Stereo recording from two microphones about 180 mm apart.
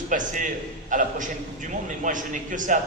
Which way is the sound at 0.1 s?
45° right (ahead or behind).